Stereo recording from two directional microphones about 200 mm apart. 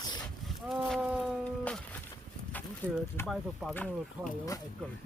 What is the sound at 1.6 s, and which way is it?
Music, 5° left (ahead or behind).